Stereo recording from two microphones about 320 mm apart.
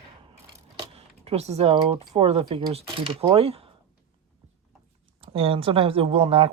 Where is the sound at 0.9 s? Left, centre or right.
Centre.